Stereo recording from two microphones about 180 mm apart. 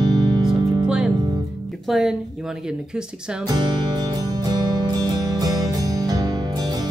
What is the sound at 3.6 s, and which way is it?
Music, 25° right (ahead or behind).